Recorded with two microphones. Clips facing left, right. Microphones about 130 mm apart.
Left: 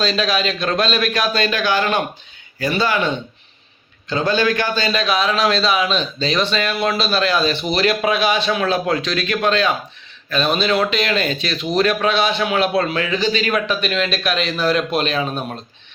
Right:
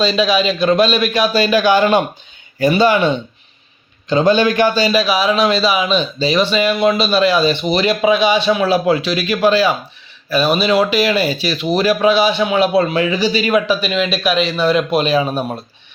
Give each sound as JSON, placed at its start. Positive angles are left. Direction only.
{"t": 0.0, "sound": "a man's voice", "side_deg": 0}
{"t": 1.5, "sound": "a man's voice", "side_deg": -15}